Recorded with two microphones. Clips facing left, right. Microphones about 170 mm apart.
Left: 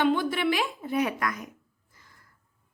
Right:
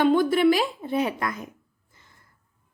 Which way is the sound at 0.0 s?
40° right (ahead or behind).